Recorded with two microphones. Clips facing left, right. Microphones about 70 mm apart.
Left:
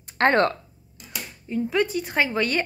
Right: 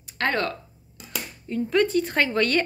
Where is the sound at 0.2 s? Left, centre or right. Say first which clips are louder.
Left 6 dB; left.